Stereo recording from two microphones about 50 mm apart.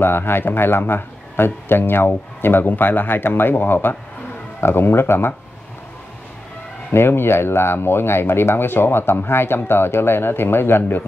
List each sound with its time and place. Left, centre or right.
0.0 s a man's voice: left
6.9 s a man's voice: left